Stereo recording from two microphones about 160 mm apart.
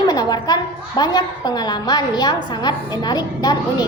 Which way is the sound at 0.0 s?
25° left (ahead or behind).